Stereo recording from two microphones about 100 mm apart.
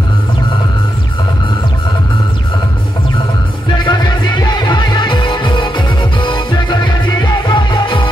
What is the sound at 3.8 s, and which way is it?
Music, 45° left (ahead or behind).